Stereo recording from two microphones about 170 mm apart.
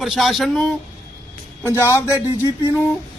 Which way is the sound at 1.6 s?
15° left (ahead or behind).